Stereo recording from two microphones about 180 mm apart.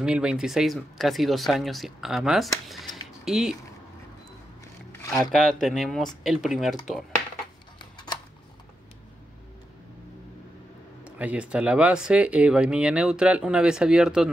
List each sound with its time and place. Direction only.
0.0 s speech: 5° right (ahead or behind)
5.1 s speech: 5° left (ahead or behind)
7.8 s a sound: 25° left (ahead or behind)
11.1 s speech: 10° right (ahead or behind)